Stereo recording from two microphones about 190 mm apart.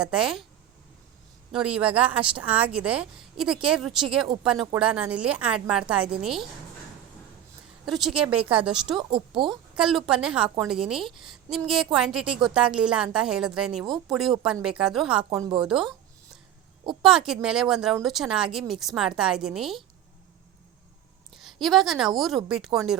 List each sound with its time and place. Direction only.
0.0 s a woman's voice: 5° right (ahead or behind)
1.5 s a woman's voice: 5° right (ahead or behind)
7.9 s a woman's voice: centre (ahead or behind)
9.0 s speech: 25° right (ahead or behind)
9.5 s a woman's voice: centre (ahead or behind)
15.4 s speech: 25° right (ahead or behind)
15.6 s a woman's voice: 5° right (ahead or behind)
17.0 s a woman's voice: centre (ahead or behind)
21.3 s a woman's voice: centre (ahead or behind)